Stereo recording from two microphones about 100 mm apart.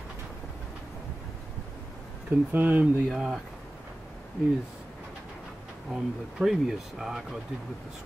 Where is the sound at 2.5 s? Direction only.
15° right (ahead or behind).